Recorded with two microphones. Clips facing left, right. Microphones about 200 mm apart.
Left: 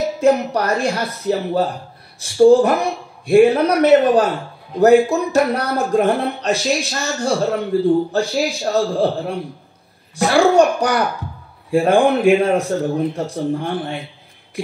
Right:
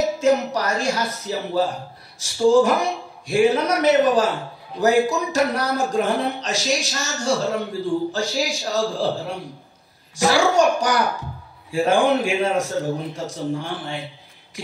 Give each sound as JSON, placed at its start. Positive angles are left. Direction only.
{"t": 0.2, "sound": "speech", "side_deg": 55}